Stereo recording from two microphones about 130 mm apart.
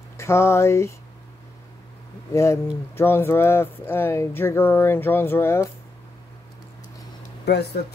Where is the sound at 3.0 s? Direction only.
15° left (ahead or behind).